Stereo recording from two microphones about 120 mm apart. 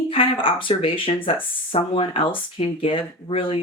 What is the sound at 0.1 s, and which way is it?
Speech, 50° left (ahead or behind).